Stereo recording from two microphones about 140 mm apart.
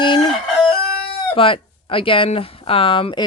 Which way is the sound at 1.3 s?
40° left (ahead or behind).